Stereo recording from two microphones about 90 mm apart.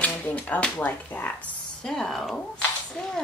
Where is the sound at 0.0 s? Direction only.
15° left (ahead or behind).